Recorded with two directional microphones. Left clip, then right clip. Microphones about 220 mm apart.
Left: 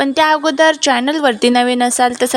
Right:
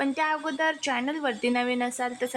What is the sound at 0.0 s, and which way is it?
A woman's voice, 35° left (ahead or behind).